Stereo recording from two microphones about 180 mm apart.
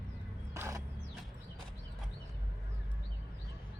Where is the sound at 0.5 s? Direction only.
15° right (ahead or behind).